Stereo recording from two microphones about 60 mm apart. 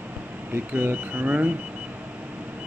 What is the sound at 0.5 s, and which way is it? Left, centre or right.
Speech, right.